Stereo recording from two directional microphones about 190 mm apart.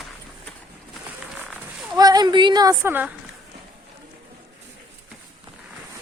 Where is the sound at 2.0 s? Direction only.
20° right (ahead or behind).